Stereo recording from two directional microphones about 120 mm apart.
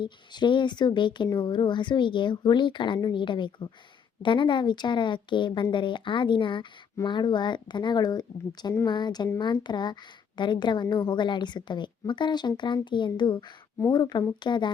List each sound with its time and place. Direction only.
0.0 s a woman's voice: 40° left (ahead or behind)